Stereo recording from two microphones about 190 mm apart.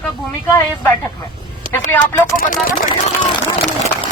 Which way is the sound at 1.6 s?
40° left (ahead or behind).